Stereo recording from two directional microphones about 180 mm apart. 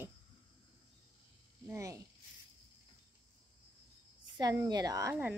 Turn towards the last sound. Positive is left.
turn(degrees=-20)  # may be behind; listen again after turning